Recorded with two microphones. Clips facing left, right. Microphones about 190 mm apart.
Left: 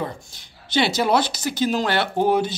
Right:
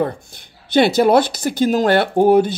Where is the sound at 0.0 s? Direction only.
55° right (ahead or behind).